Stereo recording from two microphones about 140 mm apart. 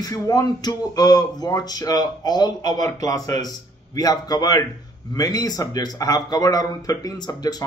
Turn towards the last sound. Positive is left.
turn(degrees=30)  # may be behind; listen again after turning